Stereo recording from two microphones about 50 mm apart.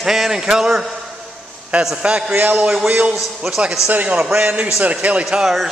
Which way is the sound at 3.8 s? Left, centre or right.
Right.